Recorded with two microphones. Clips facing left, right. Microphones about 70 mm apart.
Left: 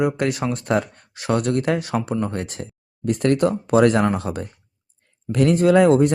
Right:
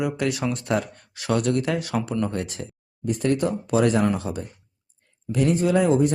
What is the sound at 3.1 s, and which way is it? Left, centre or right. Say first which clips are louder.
Speech: left 4 dB; left.